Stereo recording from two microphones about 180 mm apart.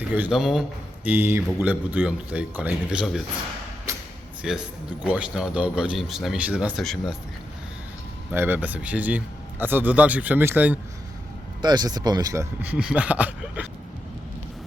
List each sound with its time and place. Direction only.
0.1 s speech: 5° right (ahead or behind)
1.0 s a man's voice: 10° right (ahead or behind)
3.9 s a sound: 15° right (ahead or behind)
4.4 s speech: centre (ahead or behind)
8.3 s a man's voice: 10° right (ahead or behind)
11.6 s speech: 25° right (ahead or behind)
12.7 s a man's voice: 5° right (ahead or behind)